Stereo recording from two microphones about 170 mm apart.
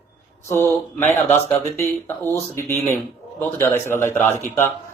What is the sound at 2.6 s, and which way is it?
A man's voice, 15° left (ahead or behind).